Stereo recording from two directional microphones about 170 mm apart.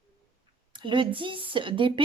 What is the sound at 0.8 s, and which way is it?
A woman's voice, 30° right (ahead or behind).